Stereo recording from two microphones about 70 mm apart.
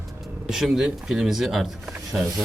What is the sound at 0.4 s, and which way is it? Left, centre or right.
Speech, centre.